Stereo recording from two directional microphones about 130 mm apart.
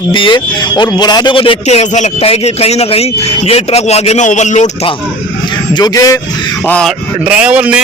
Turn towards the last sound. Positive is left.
turn(degrees=-10)  # may be behind; listen again after turning